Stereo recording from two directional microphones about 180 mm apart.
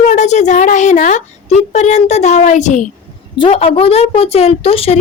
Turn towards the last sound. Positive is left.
turn(degrees=35)  # may be behind; listen again after turning